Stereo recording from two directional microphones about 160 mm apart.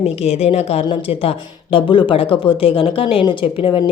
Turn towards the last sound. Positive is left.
turn(degrees=35)  # may be behind; listen again after turning